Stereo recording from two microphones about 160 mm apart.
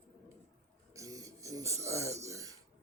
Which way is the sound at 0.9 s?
20° right (ahead or behind).